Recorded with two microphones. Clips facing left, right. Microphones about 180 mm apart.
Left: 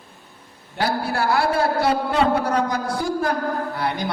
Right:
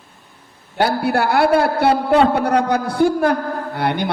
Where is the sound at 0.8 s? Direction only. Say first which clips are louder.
Right 5 dB; 60° right (ahead or behind).